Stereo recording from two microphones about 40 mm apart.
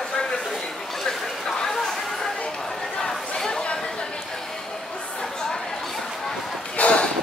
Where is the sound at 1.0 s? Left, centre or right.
Centre.